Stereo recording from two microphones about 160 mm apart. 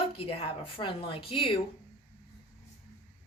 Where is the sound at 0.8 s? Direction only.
35° left (ahead or behind).